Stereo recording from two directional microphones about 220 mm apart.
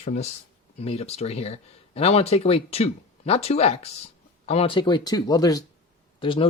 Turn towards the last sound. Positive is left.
turn(degrees=25)  # may be behind; listen again after turning